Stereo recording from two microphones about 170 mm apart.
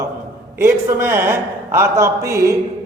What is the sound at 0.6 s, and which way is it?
A man's voice, 15° right (ahead or behind).